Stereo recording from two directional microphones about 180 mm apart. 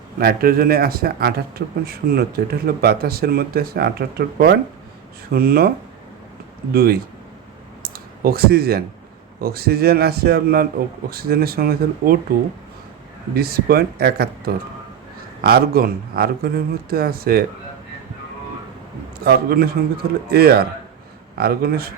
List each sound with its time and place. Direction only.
0.2 s speech: 55° right (ahead or behind)
6.7 s speech: 55° right (ahead or behind)
7.8 s a sound: 55° right (ahead or behind)
9.4 s speech: 55° right (ahead or behind)
13.3 s speech: 60° right (ahead or behind)
19.2 s speech: 60° right (ahead or behind)